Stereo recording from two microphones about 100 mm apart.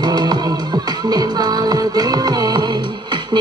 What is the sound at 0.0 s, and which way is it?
Music, 45° right (ahead or behind).